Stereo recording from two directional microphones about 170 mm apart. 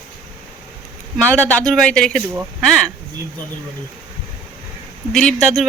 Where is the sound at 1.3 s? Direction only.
5° left (ahead or behind).